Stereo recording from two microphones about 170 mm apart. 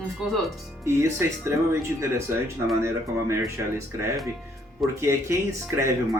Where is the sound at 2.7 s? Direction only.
15° right (ahead or behind).